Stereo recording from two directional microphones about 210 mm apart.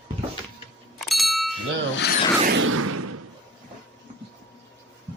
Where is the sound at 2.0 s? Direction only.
50° left (ahead or behind).